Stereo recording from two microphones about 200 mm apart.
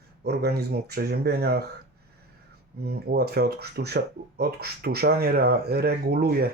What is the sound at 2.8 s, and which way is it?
Speech, 50° right (ahead or behind).